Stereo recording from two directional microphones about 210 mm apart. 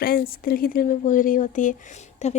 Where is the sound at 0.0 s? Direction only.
45° left (ahead or behind).